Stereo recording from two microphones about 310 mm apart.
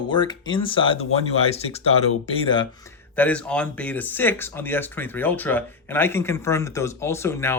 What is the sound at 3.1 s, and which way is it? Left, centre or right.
Speech, centre.